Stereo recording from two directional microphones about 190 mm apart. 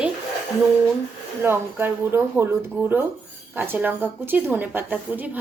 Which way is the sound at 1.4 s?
10° right (ahead or behind).